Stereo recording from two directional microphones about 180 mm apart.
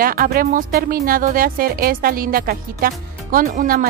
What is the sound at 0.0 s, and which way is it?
Speech, 55° right (ahead or behind).